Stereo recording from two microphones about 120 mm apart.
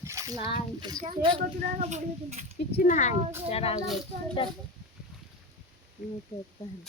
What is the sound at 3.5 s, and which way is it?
Speech, 55° left (ahead or behind).